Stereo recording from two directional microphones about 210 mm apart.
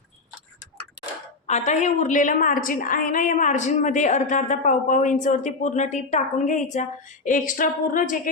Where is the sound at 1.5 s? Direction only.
35° left (ahead or behind).